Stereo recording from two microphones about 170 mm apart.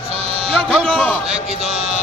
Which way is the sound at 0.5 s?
5° right (ahead or behind).